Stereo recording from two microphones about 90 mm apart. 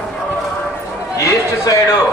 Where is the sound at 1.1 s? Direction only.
35° left (ahead or behind).